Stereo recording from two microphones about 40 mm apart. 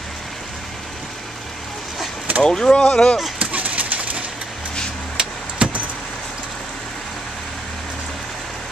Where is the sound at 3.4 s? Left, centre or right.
Right.